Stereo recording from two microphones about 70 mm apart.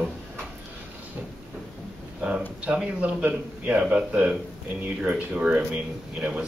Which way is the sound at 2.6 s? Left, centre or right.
Centre.